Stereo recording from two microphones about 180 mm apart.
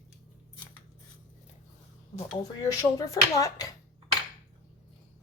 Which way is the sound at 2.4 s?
20° left (ahead or behind).